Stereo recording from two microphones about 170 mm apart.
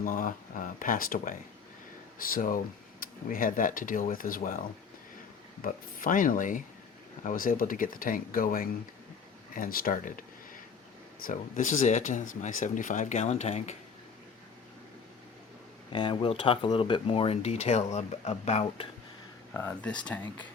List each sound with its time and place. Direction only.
0.0 s speech: 55° left (ahead or behind)
5.6 s speech: 55° left (ahead or behind)
15.9 s speech: 30° left (ahead or behind)
19.5 s speech: 10° left (ahead or behind)